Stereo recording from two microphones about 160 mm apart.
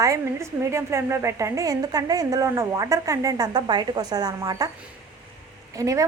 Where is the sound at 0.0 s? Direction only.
20° right (ahead or behind).